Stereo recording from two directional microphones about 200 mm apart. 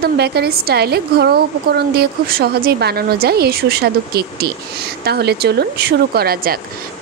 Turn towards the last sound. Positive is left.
turn(degrees=-50)  # may be behind; listen again after turning